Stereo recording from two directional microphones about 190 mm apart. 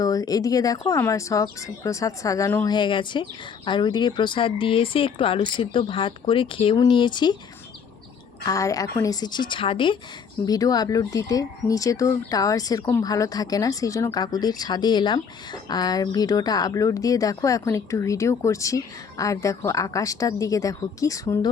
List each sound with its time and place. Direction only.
0.0 s speech: 20° left (ahead or behind)
2.7 s speech: 25° left (ahead or behind)
8.4 s speech: 15° left (ahead or behind)